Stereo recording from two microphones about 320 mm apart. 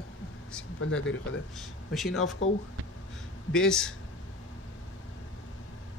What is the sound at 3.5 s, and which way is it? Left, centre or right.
Speech, centre.